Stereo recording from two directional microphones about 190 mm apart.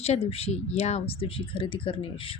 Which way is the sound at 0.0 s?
30° left (ahead or behind).